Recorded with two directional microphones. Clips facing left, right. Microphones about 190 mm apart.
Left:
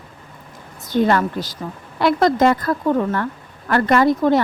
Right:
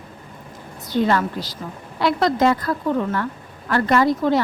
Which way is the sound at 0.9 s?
50° left (ahead or behind).